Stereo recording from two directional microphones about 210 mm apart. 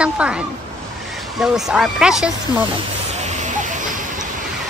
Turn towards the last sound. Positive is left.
turn(degrees=-40)  # may be behind; listen again after turning